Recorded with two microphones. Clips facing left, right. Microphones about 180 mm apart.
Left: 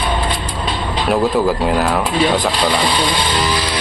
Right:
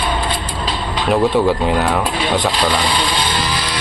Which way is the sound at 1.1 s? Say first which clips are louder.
Right 1 dB; centre (ahead or behind).